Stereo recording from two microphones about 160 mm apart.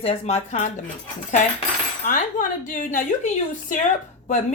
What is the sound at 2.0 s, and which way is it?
Speech, 55° left (ahead or behind).